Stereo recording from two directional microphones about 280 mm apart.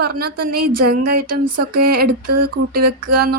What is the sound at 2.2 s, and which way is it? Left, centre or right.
Speech, right.